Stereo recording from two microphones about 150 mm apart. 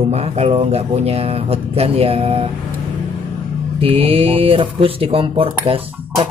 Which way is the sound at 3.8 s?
40° right (ahead or behind).